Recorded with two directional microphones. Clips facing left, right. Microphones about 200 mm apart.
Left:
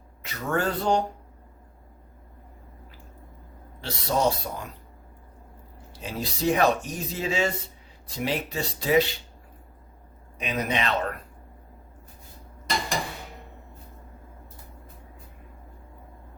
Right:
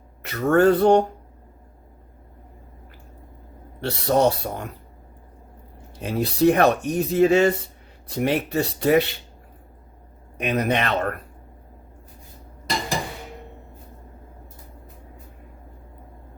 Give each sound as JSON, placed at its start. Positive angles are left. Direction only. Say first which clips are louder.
{"t": 0.2, "sound": "speech", "louder": "right 10 dB", "side_deg": -60}
{"t": 3.8, "sound": "speech", "louder": "right 6 dB", "side_deg": -60}
{"t": 6.0, "sound": "speech", "louder": "right 10 dB", "side_deg": -60}
{"t": 10.3, "sound": "speech", "louder": "right 6 dB", "side_deg": -60}